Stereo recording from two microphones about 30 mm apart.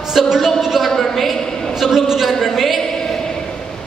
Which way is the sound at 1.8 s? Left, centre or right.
Centre.